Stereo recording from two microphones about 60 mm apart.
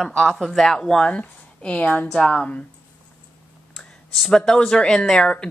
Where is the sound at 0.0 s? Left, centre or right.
Centre.